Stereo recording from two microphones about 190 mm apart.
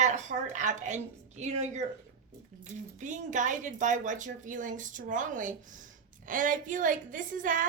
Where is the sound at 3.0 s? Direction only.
40° right (ahead or behind).